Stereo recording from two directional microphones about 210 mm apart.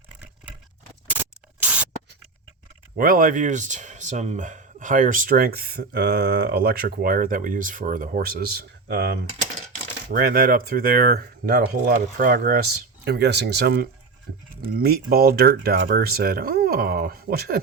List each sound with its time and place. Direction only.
1.2 s spray: 10° right (ahead or behind)
3.0 s speech: 40° right (ahead or behind)